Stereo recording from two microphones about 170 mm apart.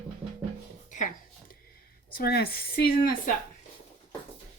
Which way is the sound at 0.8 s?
45° left (ahead or behind).